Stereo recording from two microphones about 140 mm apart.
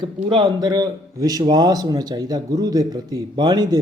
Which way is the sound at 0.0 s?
35° right (ahead or behind).